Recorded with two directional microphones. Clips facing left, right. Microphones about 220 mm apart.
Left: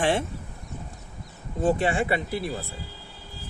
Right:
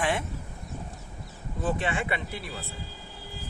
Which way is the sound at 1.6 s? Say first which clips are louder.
Left 6 dB; 30° left (ahead or behind).